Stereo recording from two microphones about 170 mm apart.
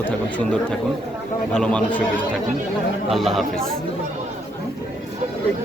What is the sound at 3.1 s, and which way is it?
Speech, centre (ahead or behind).